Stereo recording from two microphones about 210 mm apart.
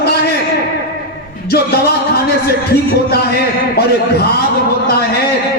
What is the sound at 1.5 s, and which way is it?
Speech, 50° left (ahead or behind).